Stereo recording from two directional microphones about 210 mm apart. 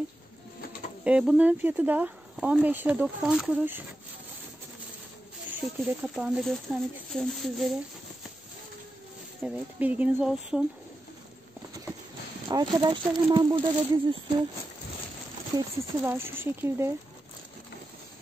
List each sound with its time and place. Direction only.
1.0 s speech: 5° right (ahead or behind)
5.5 s speech: centre (ahead or behind)
9.4 s speech: 5° right (ahead or behind)
12.4 s speech: 20° right (ahead or behind)
15.5 s speech: 10° right (ahead or behind)